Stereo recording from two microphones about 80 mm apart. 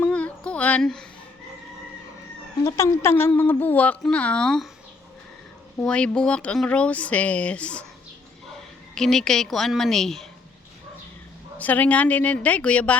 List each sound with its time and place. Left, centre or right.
0.0 s a sound: centre
0.8 s speech: centre
2.7 s a woman's voice: left; by 4.6 s centre
5.8 s speech: centre
9.0 s a woman's voice: centre
11.5 s a woman's voice: left